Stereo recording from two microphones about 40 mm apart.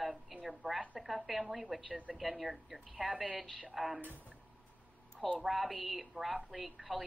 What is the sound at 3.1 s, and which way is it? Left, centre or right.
Speech, right.